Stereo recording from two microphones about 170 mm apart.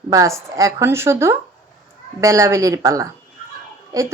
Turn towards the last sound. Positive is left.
turn(degrees=-20)  # may be behind; listen again after turning